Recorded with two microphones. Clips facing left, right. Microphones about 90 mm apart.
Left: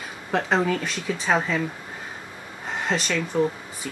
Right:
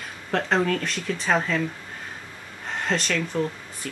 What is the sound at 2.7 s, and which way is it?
Speech, 5° left (ahead or behind).